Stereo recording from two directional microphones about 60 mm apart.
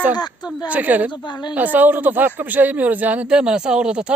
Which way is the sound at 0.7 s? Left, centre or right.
Right.